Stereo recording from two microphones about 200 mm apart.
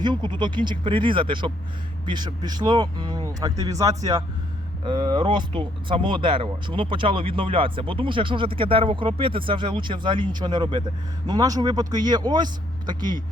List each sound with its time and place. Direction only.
0.0 s speech: 20° right (ahead or behind)